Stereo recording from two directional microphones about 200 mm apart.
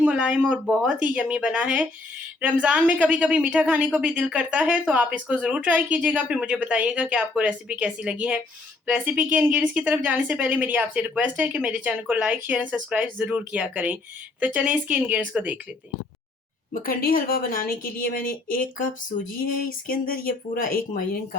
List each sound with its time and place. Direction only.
0.0 s a woman's voice: 5° right (ahead or behind)
16.8 s a woman's voice: 45° left (ahead or behind)